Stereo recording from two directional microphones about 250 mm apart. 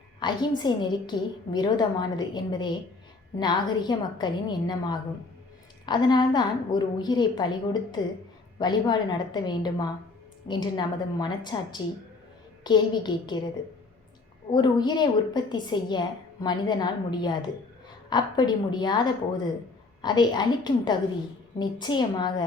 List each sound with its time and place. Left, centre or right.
0.2 s a woman's voice: centre
14.5 s a woman's voice: centre